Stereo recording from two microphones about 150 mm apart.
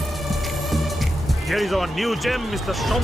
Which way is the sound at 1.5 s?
Centre (ahead or behind).